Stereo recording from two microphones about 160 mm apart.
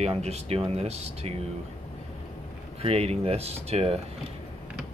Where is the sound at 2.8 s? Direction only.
40° right (ahead or behind).